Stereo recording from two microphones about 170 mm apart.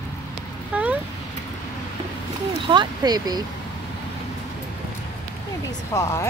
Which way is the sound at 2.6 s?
25° right (ahead or behind).